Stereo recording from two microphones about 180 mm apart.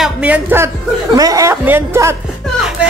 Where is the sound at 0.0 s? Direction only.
5° right (ahead or behind).